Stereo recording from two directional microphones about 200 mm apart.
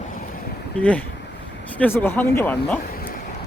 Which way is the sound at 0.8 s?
5° left (ahead or behind).